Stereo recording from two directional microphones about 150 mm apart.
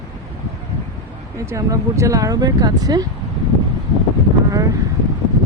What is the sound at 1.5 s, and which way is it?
Speech, 20° right (ahead or behind).